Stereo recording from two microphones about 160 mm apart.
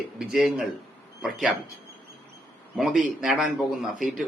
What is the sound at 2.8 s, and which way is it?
Speech, 5° right (ahead or behind).